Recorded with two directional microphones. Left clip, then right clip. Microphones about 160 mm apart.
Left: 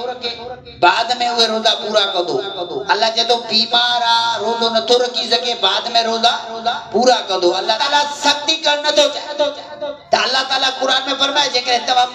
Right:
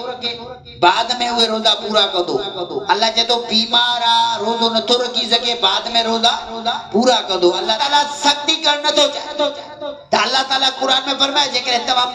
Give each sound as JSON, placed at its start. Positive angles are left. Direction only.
{"t": 0.7, "sound": "a man's voice", "side_deg": -30}